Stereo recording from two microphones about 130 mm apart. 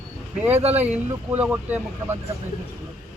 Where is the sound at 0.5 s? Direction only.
55° right (ahead or behind).